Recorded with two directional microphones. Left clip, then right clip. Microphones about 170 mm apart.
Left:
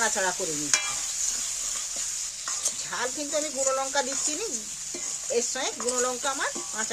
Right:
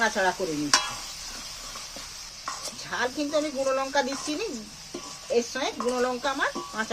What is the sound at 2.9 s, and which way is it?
Speech, 20° left (ahead or behind).